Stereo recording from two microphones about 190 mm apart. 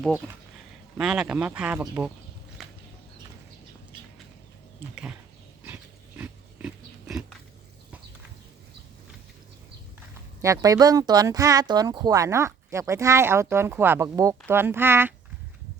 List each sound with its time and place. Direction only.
0.9 s speech: 5° right (ahead or behind)
2.6 s a sound: centre (ahead or behind)
4.8 s speech: 5° right (ahead or behind)
5.6 s dog: 10° right (ahead or behind)
10.4 s speech: 15° right (ahead or behind)